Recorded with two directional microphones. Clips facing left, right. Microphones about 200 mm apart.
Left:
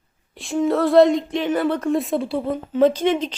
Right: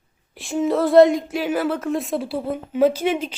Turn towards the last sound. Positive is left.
turn(degrees=-10)  # may be behind; listen again after turning